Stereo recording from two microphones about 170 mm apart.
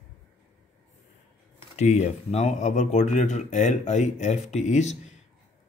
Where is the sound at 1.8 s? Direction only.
40° left (ahead or behind).